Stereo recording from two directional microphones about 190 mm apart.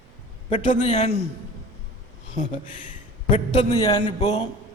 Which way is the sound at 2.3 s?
40° left (ahead or behind).